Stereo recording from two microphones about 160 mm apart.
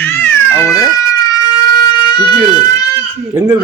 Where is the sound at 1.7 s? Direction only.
25° left (ahead or behind).